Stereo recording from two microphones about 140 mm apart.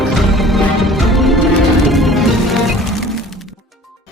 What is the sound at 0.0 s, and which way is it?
Music, centre (ahead or behind).